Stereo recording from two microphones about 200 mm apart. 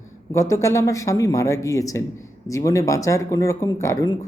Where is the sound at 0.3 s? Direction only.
15° left (ahead or behind).